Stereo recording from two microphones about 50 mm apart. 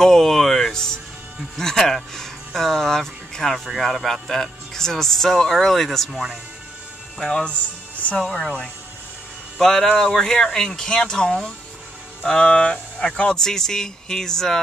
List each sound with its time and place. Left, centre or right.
0.0 s music: centre
1.6 s speech: centre
7.2 s speech: centre
7.4 s speech: left
8.2 s speech: centre